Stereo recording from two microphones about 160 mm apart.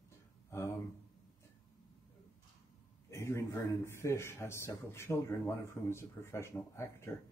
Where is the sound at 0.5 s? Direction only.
20° left (ahead or behind).